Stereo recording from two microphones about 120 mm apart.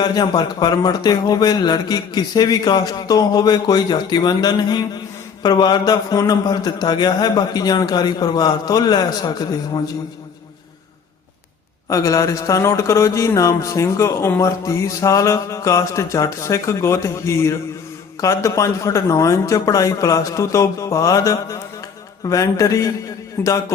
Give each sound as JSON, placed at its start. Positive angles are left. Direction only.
{"t": 0.0, "sound": "speech", "side_deg": 35}
{"t": 11.9, "sound": "speech", "side_deg": 30}